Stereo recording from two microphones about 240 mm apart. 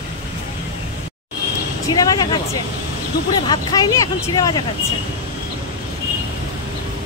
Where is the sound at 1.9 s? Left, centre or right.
Centre.